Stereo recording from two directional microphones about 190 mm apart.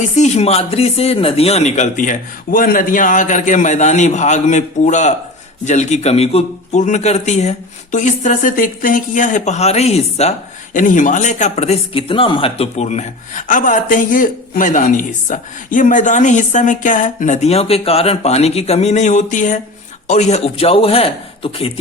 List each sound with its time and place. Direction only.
0.2 s speech: 35° left (ahead or behind)